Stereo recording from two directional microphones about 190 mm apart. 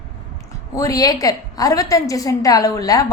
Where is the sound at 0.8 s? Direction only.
20° left (ahead or behind).